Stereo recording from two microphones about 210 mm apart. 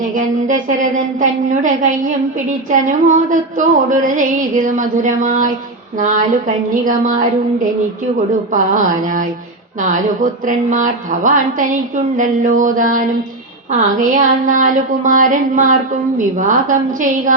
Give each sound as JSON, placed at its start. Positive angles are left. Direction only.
{"t": 0.1, "sound": "a woman's voice", "side_deg": -40}
{"t": 8.5, "sound": "a woman's voice", "side_deg": -40}